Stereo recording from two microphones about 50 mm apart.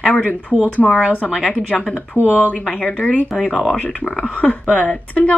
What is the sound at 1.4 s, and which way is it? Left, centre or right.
Speech, left.